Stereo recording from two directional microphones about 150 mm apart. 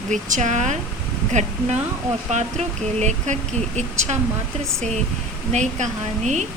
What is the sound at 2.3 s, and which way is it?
Speech, 50° right (ahead or behind).